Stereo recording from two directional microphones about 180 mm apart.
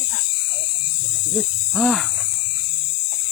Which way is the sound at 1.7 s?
Centre (ahead or behind).